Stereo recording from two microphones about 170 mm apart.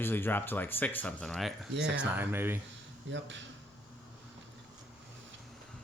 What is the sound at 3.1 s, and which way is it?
Speech, 90° right.